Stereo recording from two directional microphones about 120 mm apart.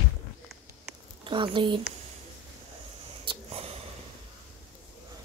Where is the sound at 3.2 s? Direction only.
55° right (ahead or behind).